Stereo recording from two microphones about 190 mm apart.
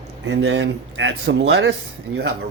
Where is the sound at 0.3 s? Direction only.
70° right (ahead or behind).